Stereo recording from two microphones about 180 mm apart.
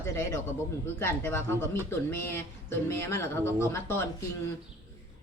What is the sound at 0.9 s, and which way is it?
Speech, 15° left (ahead or behind).